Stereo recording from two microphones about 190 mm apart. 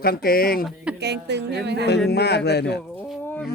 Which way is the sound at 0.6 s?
5° right (ahead or behind).